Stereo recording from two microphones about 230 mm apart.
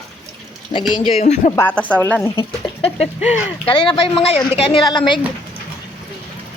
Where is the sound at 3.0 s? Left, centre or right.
Left.